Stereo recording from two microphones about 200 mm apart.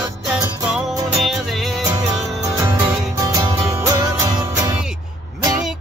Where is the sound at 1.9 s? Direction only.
15° right (ahead or behind).